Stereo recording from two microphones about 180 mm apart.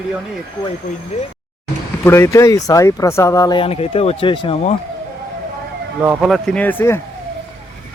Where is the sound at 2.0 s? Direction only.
15° left (ahead or behind).